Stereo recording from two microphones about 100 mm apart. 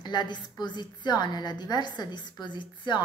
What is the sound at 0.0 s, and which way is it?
A woman's voice, 50° left (ahead or behind).